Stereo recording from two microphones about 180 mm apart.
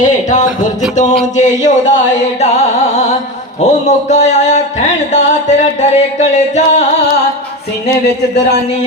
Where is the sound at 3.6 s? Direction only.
40° left (ahead or behind).